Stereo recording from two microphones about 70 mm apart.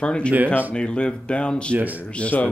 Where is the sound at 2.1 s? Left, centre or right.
Centre.